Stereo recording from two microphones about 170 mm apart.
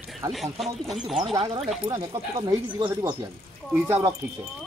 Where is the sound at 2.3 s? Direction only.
20° right (ahead or behind).